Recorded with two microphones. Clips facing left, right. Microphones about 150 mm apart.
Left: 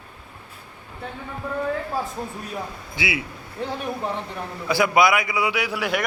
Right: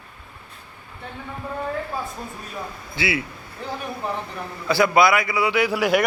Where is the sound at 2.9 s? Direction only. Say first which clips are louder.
Right 3 dB; 15° left (ahead or behind).